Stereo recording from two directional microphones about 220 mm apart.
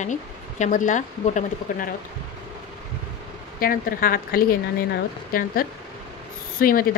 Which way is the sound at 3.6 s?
40° left (ahead or behind).